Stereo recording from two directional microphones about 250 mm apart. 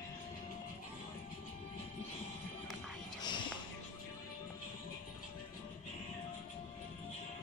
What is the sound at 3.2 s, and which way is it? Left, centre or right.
Music, centre.